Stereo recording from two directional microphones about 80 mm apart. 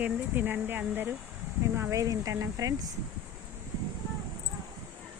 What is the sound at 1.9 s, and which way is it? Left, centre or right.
Speech, right.